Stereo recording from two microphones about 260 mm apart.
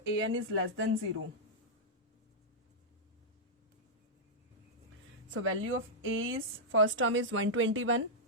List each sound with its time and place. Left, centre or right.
0.0 s a woman's voice: right
5.3 s a woman's voice: right